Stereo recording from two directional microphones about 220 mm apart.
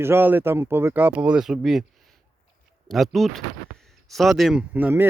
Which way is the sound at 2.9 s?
Centre (ahead or behind).